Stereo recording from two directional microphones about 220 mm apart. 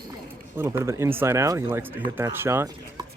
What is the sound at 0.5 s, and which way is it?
A man's voice, 10° right (ahead or behind).